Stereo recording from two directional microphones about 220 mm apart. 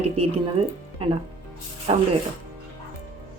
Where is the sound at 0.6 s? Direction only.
25° right (ahead or behind).